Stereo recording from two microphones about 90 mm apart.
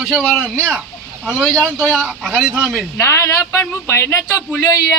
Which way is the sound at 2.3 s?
10° right (ahead or behind).